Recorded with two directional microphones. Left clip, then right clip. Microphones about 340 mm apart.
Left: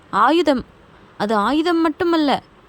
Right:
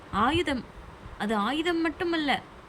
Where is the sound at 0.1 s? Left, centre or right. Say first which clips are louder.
Left 11 dB; centre.